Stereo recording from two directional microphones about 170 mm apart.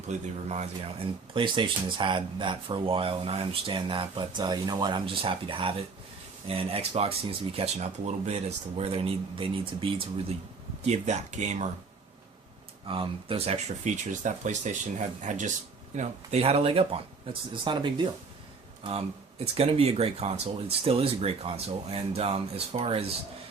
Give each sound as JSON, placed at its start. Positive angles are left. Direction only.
{"t": 0.1, "sound": "speech", "side_deg": -40}
{"t": 1.3, "sound": "speech", "side_deg": -30}
{"t": 12.8, "sound": "speech", "side_deg": -30}